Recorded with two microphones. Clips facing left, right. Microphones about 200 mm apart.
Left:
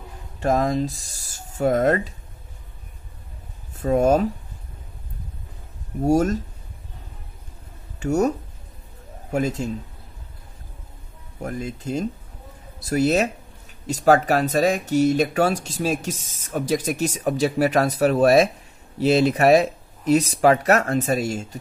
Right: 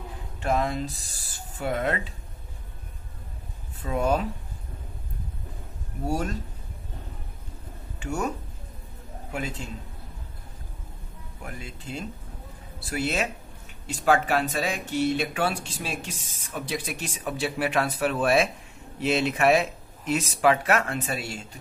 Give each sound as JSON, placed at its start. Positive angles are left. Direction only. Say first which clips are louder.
{"t": 0.4, "sound": "speech", "louder": "left 6 dB", "side_deg": 40}
{"t": 3.8, "sound": "speech", "louder": "left 8 dB", "side_deg": 45}
{"t": 6.0, "sound": "speech", "louder": "left 10 dB", "side_deg": 45}
{"t": 8.0, "sound": "speech", "louder": "left 9 dB", "side_deg": 40}
{"t": 11.4, "sound": "speech", "louder": "left 10 dB", "side_deg": 40}